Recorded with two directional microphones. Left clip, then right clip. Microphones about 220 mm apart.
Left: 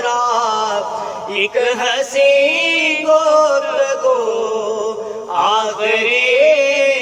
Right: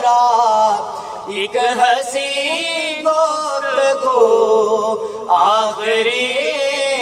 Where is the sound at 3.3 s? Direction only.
20° right (ahead or behind).